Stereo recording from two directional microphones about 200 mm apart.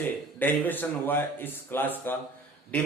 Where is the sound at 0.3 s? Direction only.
10° left (ahead or behind).